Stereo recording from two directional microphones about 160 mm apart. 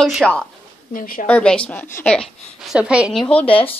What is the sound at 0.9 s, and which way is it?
Speech, 60° left (ahead or behind).